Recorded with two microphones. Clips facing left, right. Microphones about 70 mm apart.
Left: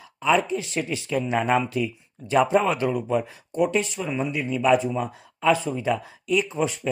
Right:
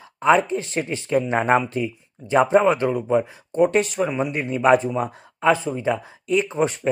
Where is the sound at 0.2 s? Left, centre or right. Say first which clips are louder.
Right 4 dB; right.